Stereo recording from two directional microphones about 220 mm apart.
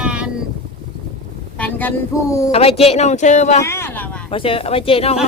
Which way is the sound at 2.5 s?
25° left (ahead or behind).